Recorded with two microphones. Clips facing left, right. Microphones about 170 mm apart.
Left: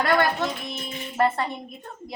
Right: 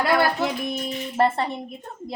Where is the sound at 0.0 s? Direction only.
10° right (ahead or behind).